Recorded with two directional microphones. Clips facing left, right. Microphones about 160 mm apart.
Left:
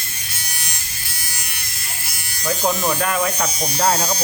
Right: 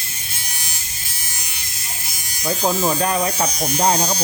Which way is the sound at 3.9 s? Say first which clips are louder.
Even; 10° right (ahead or behind).